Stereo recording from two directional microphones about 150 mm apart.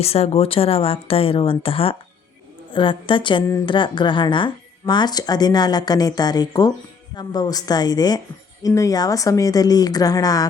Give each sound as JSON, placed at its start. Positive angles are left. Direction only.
{"t": 0.0, "sound": "speech", "side_deg": 45}